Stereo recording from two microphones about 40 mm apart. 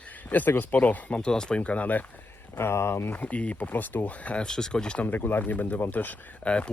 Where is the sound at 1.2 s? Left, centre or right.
Left.